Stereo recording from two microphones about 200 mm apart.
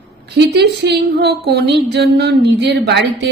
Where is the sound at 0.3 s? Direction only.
55° right (ahead or behind).